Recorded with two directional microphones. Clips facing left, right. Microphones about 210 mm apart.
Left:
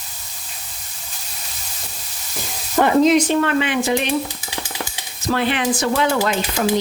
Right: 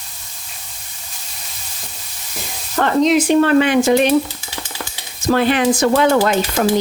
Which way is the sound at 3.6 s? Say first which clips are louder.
Right 6 dB; 45° right (ahead or behind).